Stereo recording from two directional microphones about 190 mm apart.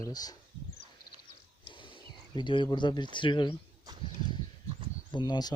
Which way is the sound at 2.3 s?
25° left (ahead or behind).